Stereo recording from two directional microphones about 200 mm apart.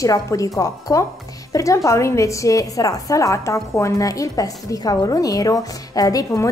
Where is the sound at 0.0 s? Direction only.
15° left (ahead or behind).